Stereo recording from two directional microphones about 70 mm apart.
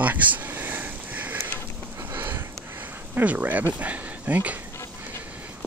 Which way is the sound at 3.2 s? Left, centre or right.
Right.